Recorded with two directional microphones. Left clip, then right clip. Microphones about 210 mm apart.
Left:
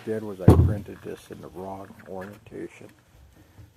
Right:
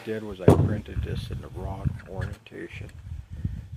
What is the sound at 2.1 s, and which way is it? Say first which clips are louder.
Speech: left 6 dB; 15° right (ahead or behind).